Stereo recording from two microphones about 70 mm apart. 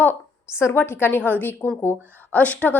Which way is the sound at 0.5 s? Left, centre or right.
Left.